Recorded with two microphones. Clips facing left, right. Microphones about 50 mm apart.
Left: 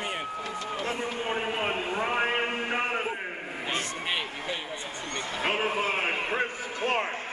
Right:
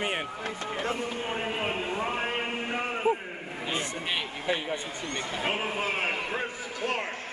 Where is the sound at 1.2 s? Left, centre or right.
Centre.